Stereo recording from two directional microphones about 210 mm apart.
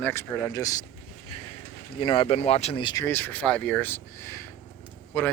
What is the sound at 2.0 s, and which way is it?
Speech, 25° left (ahead or behind).